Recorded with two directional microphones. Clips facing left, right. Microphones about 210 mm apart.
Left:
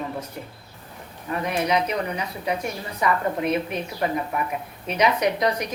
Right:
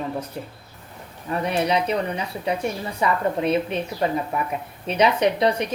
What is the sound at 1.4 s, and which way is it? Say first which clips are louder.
A woman's voice: right 1 dB; 35° right (ahead or behind).